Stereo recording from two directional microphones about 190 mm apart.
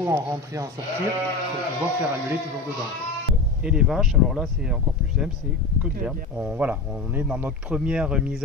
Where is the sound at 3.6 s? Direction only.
5° right (ahead or behind).